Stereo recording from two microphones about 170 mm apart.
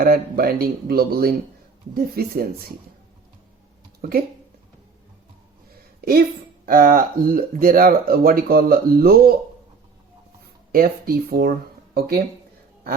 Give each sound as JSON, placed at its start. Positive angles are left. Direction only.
{"t": 0.0, "sound": "speech", "side_deg": -60}
{"t": 4.0, "sound": "speech", "side_deg": -60}
{"t": 5.7, "sound": "a sound", "side_deg": -60}
{"t": 6.7, "sound": "speech", "side_deg": -55}
{"t": 10.7, "sound": "speech", "side_deg": -60}